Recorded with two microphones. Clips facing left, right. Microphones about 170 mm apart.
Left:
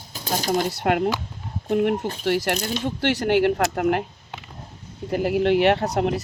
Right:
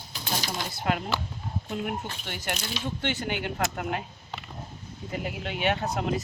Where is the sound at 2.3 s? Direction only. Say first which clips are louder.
Left 14 dB; 80° left.